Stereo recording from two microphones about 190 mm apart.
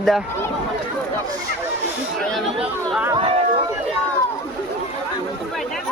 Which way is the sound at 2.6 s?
5° right (ahead or behind).